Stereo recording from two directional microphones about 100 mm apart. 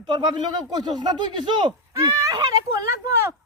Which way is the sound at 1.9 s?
35° right (ahead or behind).